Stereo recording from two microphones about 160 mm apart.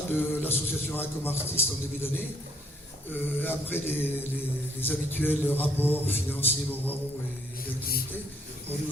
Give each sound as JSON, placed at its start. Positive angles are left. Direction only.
{"t": 0.2, "sound": "a man's voice", "side_deg": 15}